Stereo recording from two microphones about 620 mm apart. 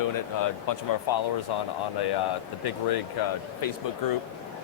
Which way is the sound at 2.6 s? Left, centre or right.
Left.